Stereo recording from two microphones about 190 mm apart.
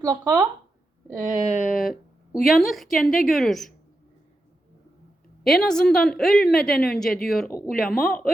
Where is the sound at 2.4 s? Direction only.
Centre (ahead or behind).